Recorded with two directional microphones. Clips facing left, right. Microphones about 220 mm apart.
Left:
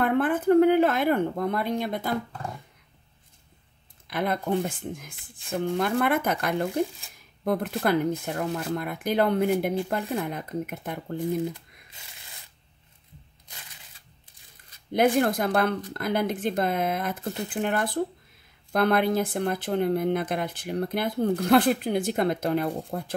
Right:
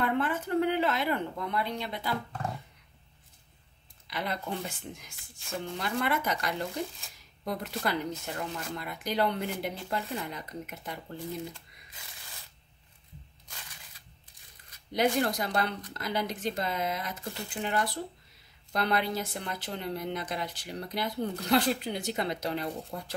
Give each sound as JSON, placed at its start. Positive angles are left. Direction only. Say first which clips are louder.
{"t": 0.0, "sound": "a sound", "louder": "left 7 dB", "side_deg": 50}
{"t": 4.1, "sound": "speech", "louder": "left 8 dB", "side_deg": 50}
{"t": 14.9, "sound": "speech", "louder": "left 6 dB", "side_deg": 55}